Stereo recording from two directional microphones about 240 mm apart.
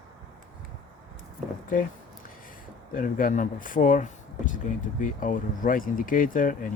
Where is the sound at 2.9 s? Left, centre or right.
Left.